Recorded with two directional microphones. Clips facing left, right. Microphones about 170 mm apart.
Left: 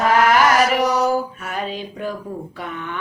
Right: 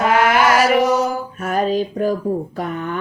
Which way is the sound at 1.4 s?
45° right (ahead or behind).